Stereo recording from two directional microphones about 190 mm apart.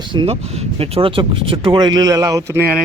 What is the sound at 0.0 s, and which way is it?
Speech, 25° right (ahead or behind).